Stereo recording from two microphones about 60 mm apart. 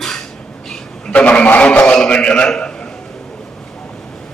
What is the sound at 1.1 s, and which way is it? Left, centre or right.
A man's voice, left.